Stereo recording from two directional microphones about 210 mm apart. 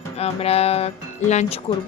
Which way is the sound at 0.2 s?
30° left (ahead or behind).